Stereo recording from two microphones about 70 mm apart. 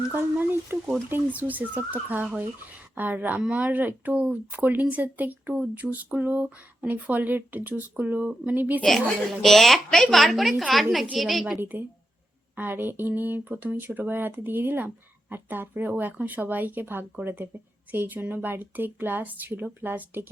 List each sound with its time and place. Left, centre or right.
0.1 s speech: right
8.8 s a woman's voice: centre
11.5 s speech: right